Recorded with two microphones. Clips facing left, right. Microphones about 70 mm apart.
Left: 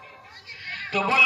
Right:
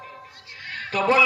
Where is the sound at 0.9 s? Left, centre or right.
Right.